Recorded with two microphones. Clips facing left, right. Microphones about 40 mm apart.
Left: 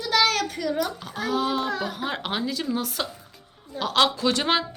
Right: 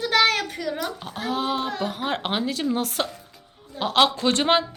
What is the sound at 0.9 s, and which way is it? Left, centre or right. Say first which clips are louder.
A woman's voice: left 1 dB; right.